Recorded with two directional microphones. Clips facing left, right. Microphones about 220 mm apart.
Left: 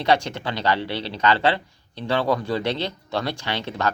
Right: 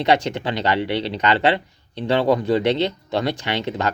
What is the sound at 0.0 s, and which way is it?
Speech, 20° right (ahead or behind).